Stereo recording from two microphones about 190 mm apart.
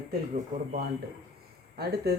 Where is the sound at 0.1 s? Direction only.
45° right (ahead or behind).